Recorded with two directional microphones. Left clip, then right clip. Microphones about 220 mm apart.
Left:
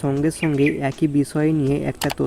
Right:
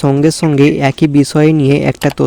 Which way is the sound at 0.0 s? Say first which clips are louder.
Right 10 dB; 40° right (ahead or behind).